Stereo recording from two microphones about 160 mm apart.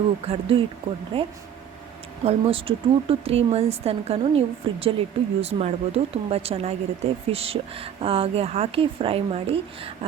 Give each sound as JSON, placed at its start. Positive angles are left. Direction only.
{"t": 0.3, "sound": "speech", "side_deg": -35}